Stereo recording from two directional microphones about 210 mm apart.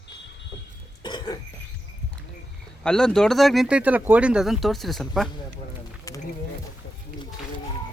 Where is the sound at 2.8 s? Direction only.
5° left (ahead or behind).